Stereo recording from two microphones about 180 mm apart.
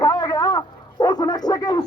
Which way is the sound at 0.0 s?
20° left (ahead or behind).